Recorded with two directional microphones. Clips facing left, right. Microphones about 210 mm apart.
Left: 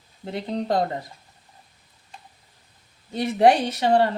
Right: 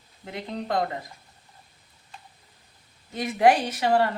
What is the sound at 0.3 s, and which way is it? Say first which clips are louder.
Speech: left 5 dB; 35° left (ahead or behind).